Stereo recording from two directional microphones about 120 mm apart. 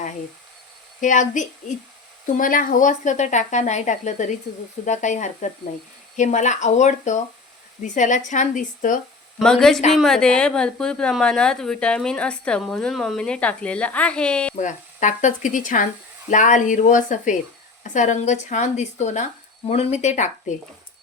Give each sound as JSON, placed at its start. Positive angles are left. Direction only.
{"t": 1.0, "sound": "speech", "side_deg": 90}
{"t": 9.4, "sound": "a woman's voice", "side_deg": 5}
{"t": 14.5, "sound": "speech", "side_deg": 90}
{"t": 19.6, "sound": "speech", "side_deg": 60}